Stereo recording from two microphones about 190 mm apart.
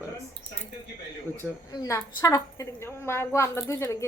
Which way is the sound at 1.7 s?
15° left (ahead or behind).